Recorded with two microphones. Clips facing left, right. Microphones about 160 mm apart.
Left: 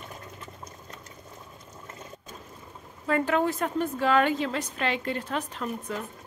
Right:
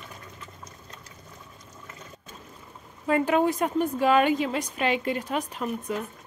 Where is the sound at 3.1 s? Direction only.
15° right (ahead or behind).